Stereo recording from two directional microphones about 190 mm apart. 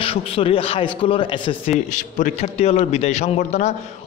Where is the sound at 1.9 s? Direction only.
40° left (ahead or behind).